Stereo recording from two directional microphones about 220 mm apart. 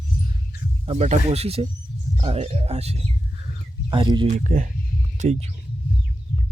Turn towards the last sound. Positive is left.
turn(degrees=-30)  # may be behind; listen again after turning